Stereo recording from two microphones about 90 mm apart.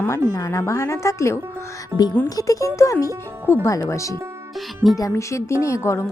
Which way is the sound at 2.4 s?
40° left (ahead or behind).